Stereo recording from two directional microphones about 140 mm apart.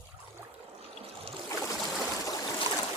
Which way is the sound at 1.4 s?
25° left (ahead or behind).